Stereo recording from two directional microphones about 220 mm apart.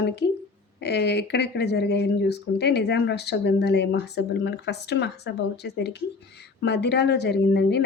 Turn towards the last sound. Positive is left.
turn(degrees=50)  # may be behind; listen again after turning